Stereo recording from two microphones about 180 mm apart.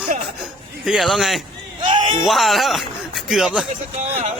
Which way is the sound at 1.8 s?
25° right (ahead or behind).